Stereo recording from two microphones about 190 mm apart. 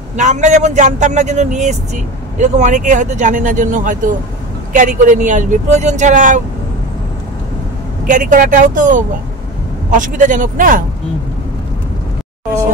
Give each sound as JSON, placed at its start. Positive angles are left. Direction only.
{"t": 0.1, "sound": "speech", "side_deg": -40}
{"t": 8.1, "sound": "speech", "side_deg": -45}